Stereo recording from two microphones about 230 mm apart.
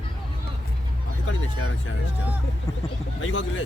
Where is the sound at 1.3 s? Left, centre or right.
Left.